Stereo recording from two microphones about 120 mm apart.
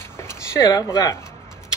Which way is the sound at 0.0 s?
20° left (ahead or behind).